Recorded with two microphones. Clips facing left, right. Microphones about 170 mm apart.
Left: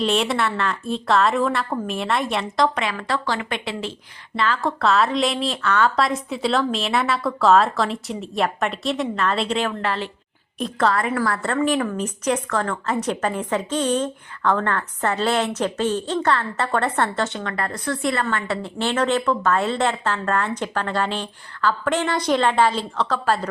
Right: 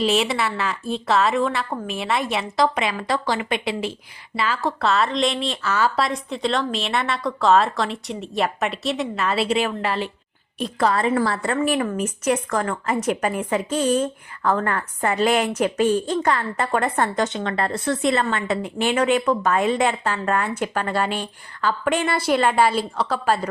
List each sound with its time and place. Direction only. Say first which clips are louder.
0.0 s a woman's voice: even; 5° right (ahead or behind)
2.7 s a woman's voice: right 1 dB; 15° right (ahead or behind)
10.8 s a woman's voice: right 1 dB; 25° right (ahead or behind)
11.4 s a woman's voice: even; 10° right (ahead or behind)